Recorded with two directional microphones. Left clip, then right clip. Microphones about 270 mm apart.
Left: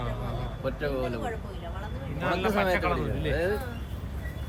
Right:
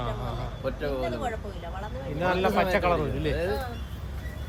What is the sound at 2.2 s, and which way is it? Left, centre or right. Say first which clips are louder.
A man's voice: right 2 dB; centre.